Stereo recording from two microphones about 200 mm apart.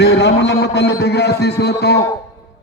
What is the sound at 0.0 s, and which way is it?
Music, 55° left (ahead or behind).